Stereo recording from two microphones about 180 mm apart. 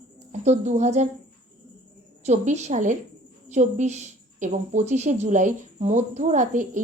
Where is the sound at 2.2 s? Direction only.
40° right (ahead or behind).